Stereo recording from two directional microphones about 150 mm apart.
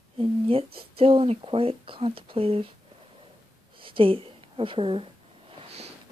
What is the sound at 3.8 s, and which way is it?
A woman's voice, 35° right (ahead or behind).